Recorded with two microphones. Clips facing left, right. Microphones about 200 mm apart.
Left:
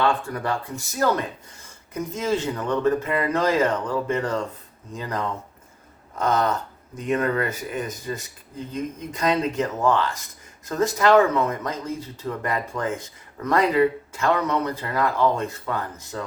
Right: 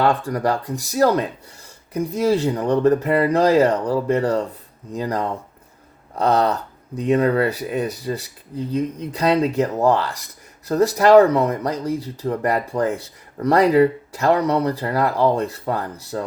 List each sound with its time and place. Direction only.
0.0 s speech: 40° right (ahead or behind)